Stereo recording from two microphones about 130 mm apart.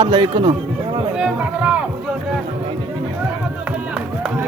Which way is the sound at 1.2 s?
10° right (ahead or behind).